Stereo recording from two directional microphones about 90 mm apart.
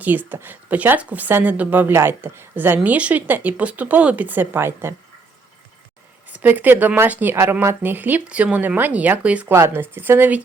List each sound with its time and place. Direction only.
0.0 s speech: 20° right (ahead or behind)
6.2 s speech: 20° right (ahead or behind)
9.5 s speech: 30° right (ahead or behind)